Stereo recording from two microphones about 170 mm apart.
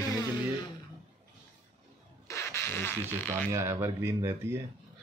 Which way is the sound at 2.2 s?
15° left (ahead or behind).